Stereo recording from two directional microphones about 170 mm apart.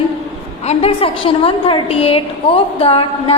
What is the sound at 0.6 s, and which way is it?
A woman's voice, 35° left (ahead or behind).